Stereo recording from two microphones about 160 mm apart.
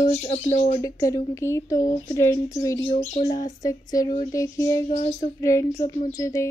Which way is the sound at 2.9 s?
45° left (ahead or behind).